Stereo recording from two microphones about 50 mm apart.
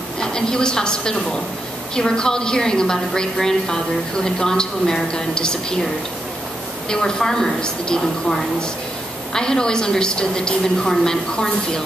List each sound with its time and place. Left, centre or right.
0.2 s a woman's voice: centre
6.9 s a woman's voice: centre